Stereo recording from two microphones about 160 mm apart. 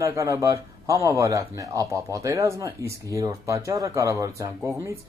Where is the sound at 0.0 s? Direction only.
20° right (ahead or behind).